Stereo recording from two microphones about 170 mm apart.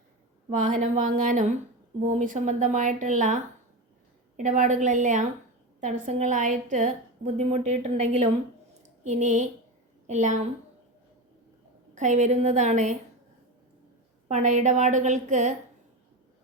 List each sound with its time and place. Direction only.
0.5 s a woman's voice: 45° right (ahead or behind)
11.9 s a woman's voice: 45° right (ahead or behind)
14.3 s a woman's voice: 45° right (ahead or behind)